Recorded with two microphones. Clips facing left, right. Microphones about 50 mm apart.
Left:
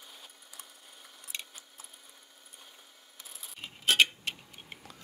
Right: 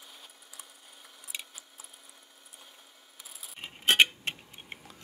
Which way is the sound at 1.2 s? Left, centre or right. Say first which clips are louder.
Even; centre.